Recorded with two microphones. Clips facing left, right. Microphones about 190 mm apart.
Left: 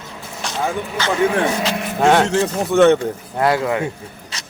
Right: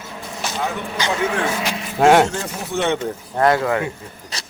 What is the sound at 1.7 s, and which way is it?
Speech, 60° left (ahead or behind).